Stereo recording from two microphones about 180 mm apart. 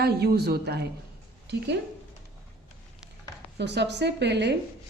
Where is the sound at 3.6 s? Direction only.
70° right (ahead or behind).